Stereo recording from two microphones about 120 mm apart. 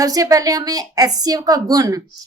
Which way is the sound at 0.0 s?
30° right (ahead or behind).